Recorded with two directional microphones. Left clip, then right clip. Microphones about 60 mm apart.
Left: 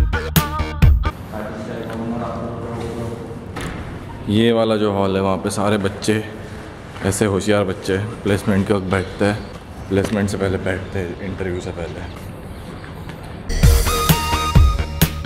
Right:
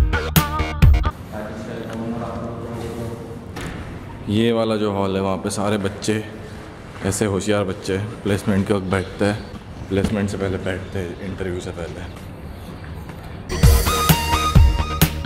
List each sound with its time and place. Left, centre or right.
0.1 s music: centre
4.3 s a man's voice: centre
9.8 s speech: centre
10.3 s speech: left
10.6 s speech: centre
13.5 s music: centre